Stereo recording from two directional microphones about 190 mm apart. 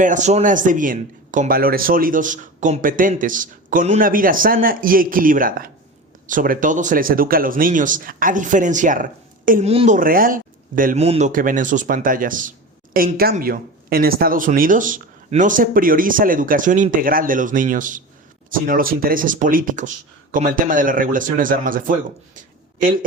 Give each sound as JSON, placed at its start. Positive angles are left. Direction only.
{"t": 0.0, "sound": "speech", "side_deg": -40}